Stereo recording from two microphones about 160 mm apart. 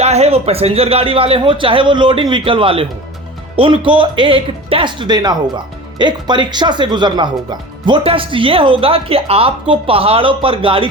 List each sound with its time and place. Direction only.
0.0 s speech: 40° right (ahead or behind)